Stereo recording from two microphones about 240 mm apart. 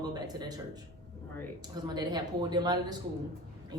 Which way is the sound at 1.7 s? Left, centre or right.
Centre.